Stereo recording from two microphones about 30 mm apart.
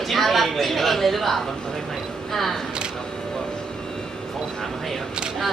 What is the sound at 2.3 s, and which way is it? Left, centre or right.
Music, centre.